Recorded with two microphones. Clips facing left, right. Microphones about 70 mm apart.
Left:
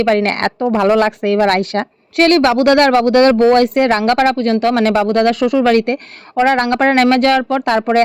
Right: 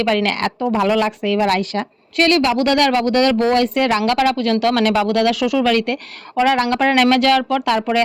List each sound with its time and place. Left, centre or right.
0.0 s speech: left
1.0 s a woman's voice: left
3.0 s speech: left
3.2 s a woman's voice: left
6.3 s speech: left
6.6 s speech: left